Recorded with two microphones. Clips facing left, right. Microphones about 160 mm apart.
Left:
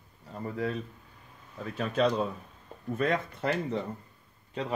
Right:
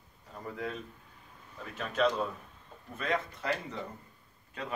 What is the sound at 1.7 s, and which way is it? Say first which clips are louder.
Speech: left 2 dB; 35° left (ahead or behind).